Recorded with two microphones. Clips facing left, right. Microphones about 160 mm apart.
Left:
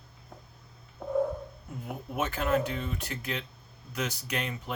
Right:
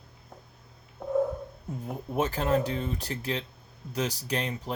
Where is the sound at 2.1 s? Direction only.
30° right (ahead or behind).